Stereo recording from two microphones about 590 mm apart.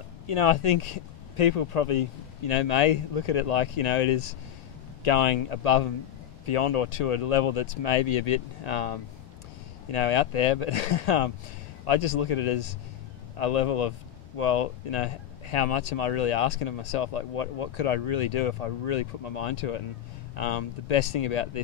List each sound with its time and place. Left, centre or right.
0.3 s speech: left